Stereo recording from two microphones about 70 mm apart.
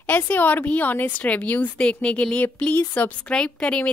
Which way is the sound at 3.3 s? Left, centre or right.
Centre.